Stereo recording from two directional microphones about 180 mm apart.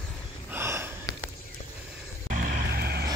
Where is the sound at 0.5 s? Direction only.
15° right (ahead or behind).